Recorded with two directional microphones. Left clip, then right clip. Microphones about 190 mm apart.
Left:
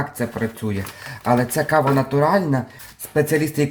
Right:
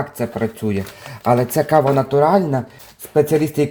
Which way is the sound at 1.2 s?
35° right (ahead or behind).